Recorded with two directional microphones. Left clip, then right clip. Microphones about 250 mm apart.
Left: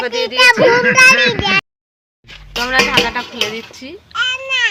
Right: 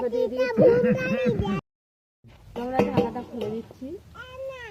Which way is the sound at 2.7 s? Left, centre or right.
Left.